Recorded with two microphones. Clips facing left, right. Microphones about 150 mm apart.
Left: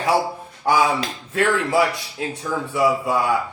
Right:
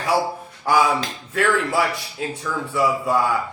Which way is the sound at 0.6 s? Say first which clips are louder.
Even; 20° left (ahead or behind).